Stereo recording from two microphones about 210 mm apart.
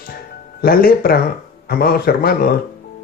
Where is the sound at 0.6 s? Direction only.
45° left (ahead or behind).